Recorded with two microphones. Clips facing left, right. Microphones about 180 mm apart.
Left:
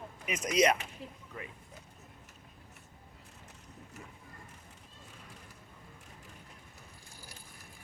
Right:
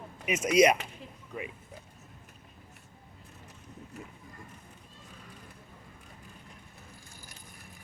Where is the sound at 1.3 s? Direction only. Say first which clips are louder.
Right 7 dB; 15° right (ahead or behind).